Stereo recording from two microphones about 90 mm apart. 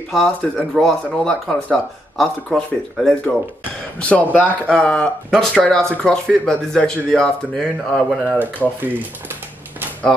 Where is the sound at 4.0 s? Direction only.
15° left (ahead or behind).